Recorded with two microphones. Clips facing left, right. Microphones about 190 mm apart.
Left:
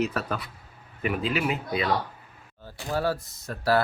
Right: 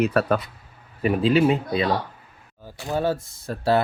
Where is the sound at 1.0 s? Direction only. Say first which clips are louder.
Right 8 dB; 30° right (ahead or behind).